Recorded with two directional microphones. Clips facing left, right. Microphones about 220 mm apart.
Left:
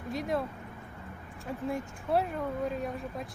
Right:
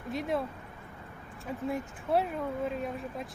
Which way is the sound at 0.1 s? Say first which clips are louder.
Even; centre (ahead or behind).